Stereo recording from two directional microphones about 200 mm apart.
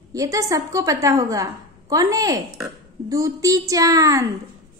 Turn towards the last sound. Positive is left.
turn(degrees=-15)  # may be behind; listen again after turning